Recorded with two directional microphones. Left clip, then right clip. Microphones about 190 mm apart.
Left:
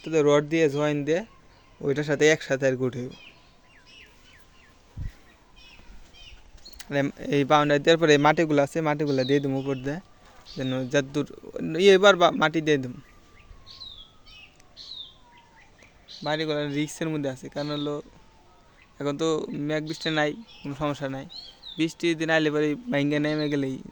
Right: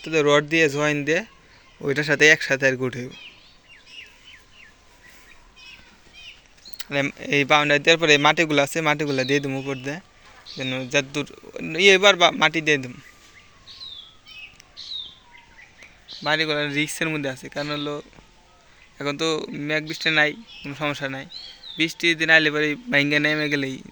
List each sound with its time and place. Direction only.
0.0 s a man's voice: 10° left (ahead or behind)
6.7 s a man's voice: 25° left (ahead or behind)
10.6 s speech: 30° left (ahead or behind)
13.7 s bird: 15° left (ahead or behind)
15.8 s a man's voice: 10° left (ahead or behind)